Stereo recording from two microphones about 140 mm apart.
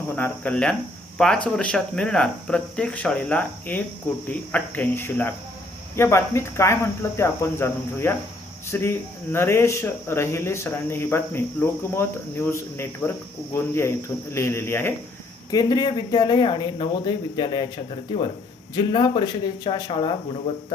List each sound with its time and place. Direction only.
0.2 s speech: 10° left (ahead or behind)
15.4 s speech: 30° left (ahead or behind)
18.7 s speech: 35° left (ahead or behind)